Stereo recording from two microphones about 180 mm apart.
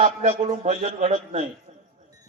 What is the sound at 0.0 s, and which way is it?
A man's voice, 40° right (ahead or behind).